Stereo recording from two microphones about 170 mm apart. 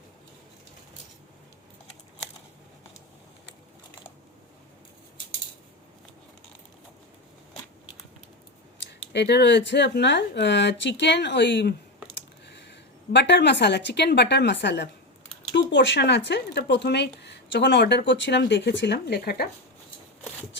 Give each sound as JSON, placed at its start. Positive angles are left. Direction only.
{"t": 8.9, "sound": "speech", "side_deg": 85}